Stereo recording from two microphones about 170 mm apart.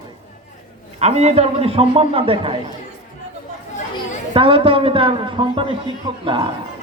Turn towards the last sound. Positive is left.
turn(degrees=-30)  # may be behind; listen again after turning